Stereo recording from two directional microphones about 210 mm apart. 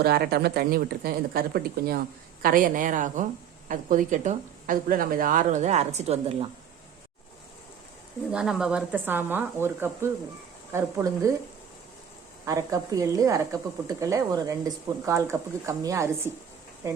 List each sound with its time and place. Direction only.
0.0 s a woman's voice: 50° right (ahead or behind); by 6.5 s 30° right (ahead or behind)
8.3 s a woman's voice: 5° right (ahead or behind)
12.5 s a woman's voice: 15° right (ahead or behind)